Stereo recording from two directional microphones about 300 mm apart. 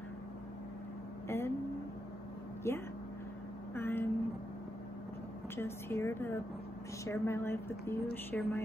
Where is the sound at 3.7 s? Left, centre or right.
Centre.